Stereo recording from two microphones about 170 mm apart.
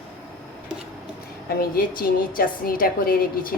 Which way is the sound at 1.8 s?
55° left (ahead or behind).